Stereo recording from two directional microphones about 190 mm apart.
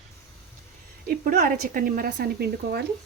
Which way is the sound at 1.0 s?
45° right (ahead or behind).